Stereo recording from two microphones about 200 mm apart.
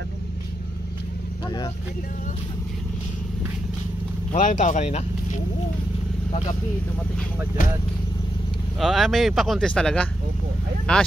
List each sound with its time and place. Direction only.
4.3 s speech: 35° left (ahead or behind)
8.7 s speech: centre (ahead or behind)